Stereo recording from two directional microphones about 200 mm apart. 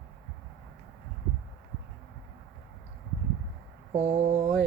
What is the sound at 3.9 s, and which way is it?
Mantra, 35° right (ahead or behind).